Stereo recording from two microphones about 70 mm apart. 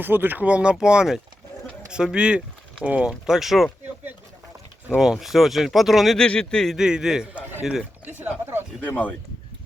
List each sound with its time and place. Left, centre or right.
0.0 s speech: right
0.4 s speech: centre
4.9 s speech: centre
6.1 s speech: centre
6.7 s speech: centre
8.8 s speech: left